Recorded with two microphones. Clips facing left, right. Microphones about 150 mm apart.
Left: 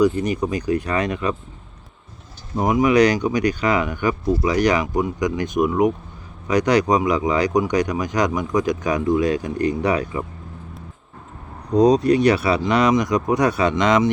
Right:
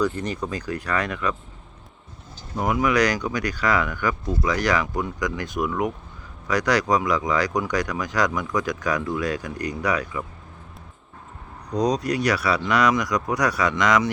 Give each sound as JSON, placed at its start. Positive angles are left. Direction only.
{"t": 0.0, "sound": "speech", "side_deg": 15}
{"t": 2.6, "sound": "speech", "side_deg": 20}
{"t": 11.7, "sound": "speech", "side_deg": 25}